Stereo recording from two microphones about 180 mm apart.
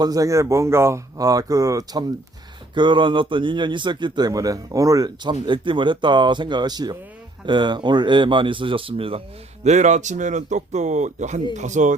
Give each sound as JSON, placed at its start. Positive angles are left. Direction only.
{"t": 0.0, "sound": "speech", "side_deg": -20}
{"t": 9.6, "sound": "speech", "side_deg": -40}